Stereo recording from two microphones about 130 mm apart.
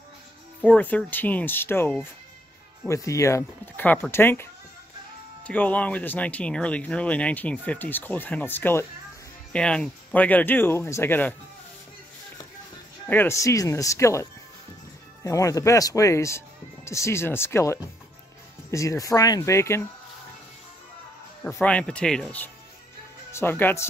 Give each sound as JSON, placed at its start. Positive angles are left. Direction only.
{"t": 0.7, "sound": "speech", "side_deg": 10}
{"t": 13.1, "sound": "speech", "side_deg": 20}
{"t": 15.2, "sound": "speech", "side_deg": 25}
{"t": 21.5, "sound": "speech", "side_deg": 5}